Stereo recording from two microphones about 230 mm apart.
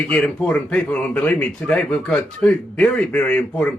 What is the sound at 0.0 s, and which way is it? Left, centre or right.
A man's voice, centre.